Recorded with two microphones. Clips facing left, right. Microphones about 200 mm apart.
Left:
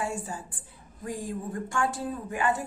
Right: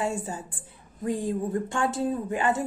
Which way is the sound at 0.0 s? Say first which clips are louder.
Right 3 dB; 25° right (ahead or behind).